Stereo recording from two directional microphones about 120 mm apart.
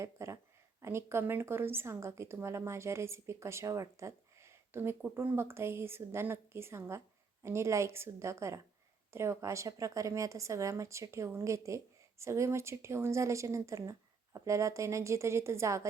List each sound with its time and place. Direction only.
0.0 s speech: 25° right (ahead or behind)